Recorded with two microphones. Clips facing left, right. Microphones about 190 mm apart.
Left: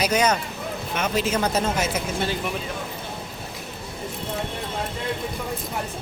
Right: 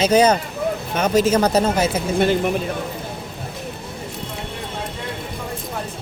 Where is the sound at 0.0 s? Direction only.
30° right (ahead or behind).